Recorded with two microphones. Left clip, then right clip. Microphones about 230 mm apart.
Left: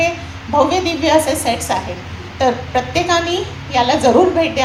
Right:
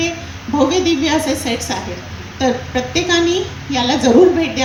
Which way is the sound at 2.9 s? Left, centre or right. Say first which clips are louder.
Right 2 dB; left.